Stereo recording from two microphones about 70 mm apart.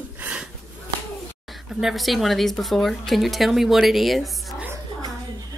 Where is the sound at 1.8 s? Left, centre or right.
Centre.